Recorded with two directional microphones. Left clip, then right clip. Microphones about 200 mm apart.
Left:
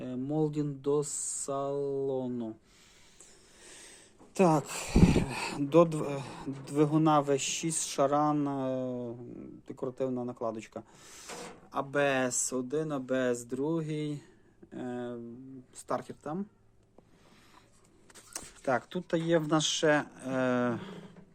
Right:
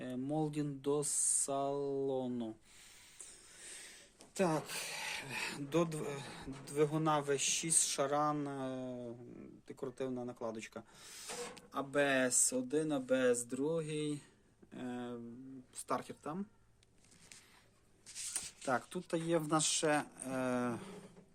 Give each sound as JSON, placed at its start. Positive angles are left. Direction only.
{"t": 0.0, "sound": "speech", "side_deg": 0}
{"t": 3.6, "sound": "a sound", "side_deg": 10}
{"t": 4.4, "sound": "speech", "side_deg": 35}
{"t": 11.7, "sound": "speech", "side_deg": 25}
{"t": 18.6, "sound": "speech", "side_deg": -5}